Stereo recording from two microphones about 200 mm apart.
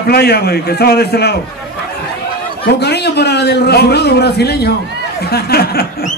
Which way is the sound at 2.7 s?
55° left (ahead or behind).